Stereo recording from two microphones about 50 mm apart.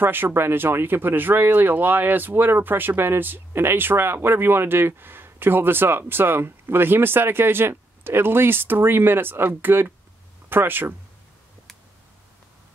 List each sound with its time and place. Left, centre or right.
0.0 s speech: right